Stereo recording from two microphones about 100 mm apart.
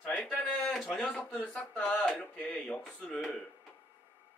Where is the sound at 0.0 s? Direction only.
10° left (ahead or behind).